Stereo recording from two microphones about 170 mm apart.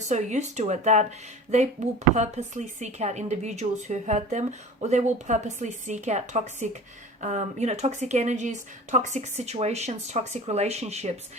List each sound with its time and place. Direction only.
0.0 s speech: 45° right (ahead or behind)